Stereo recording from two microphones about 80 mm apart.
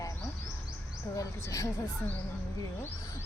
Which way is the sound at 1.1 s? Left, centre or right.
Left.